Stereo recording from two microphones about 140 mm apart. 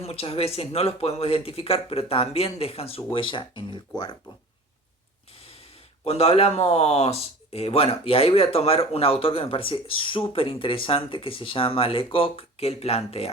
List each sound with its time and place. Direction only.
0.0 s speech: 45° left (ahead or behind)
6.1 s speech: 45° left (ahead or behind)